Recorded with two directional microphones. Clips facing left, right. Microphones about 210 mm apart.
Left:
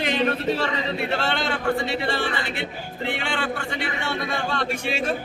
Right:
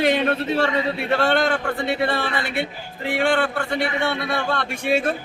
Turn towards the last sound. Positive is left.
turn(degrees=-55)  # may be behind; listen again after turning